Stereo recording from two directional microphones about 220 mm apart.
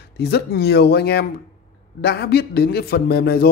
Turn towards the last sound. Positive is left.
turn(degrees=45)  # may be behind; listen again after turning